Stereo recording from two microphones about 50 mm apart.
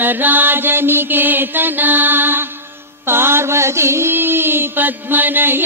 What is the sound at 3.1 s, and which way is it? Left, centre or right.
Music, right.